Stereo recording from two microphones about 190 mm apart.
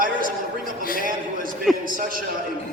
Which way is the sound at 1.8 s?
45° right (ahead or behind).